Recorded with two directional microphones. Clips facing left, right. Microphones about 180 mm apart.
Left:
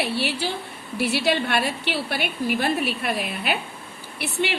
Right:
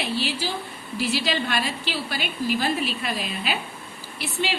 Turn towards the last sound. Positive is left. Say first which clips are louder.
# left 2 dB
turn(degrees=65)  # may be behind; listen again after turning